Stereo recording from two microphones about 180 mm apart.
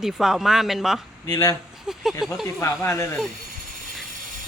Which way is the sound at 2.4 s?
15° left (ahead or behind).